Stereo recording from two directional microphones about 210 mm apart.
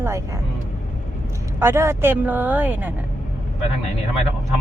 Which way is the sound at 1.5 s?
10° right (ahead or behind).